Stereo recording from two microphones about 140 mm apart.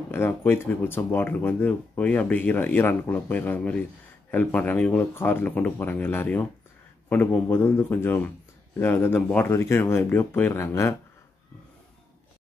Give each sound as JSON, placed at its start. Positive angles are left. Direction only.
{"t": 0.1, "sound": "speech", "side_deg": 15}